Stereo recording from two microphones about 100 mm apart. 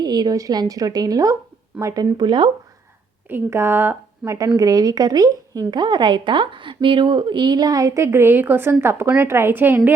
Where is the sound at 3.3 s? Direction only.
25° right (ahead or behind).